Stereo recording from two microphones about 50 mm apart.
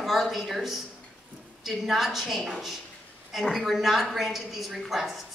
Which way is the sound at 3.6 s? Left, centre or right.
Centre.